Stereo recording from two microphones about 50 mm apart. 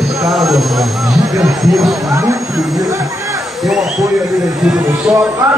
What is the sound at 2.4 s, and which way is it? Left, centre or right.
Speech, centre.